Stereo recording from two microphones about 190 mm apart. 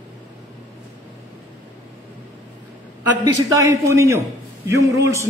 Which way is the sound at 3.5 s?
15° right (ahead or behind).